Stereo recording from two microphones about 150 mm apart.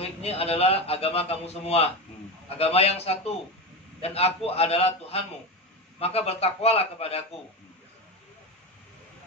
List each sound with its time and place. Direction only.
0.0 s a man's voice: 40° left (ahead or behind)